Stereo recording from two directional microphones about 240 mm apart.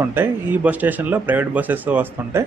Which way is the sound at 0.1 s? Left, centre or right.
Centre.